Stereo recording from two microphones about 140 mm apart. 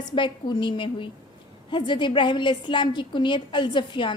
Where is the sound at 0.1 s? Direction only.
35° left (ahead or behind).